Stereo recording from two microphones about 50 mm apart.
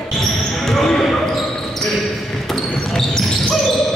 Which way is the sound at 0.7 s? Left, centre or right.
Centre.